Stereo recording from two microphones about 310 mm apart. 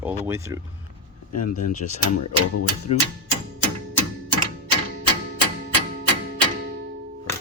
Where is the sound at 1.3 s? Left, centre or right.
Left.